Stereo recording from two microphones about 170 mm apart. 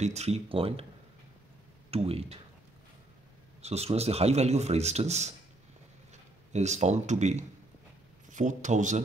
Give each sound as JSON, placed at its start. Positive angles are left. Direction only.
{"t": 0.0, "sound": "speech", "side_deg": -40}
{"t": 1.9, "sound": "speech", "side_deg": -35}
{"t": 3.6, "sound": "speech", "side_deg": -40}
{"t": 6.5, "sound": "speech", "side_deg": -40}